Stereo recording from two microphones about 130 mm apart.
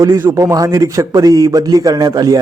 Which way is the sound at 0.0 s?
20° right (ahead or behind).